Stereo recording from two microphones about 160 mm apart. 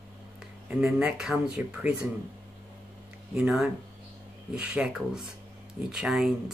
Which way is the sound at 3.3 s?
5° right (ahead or behind).